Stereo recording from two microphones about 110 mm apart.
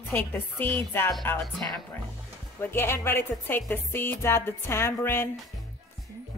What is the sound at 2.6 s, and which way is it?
Music, 20° left (ahead or behind).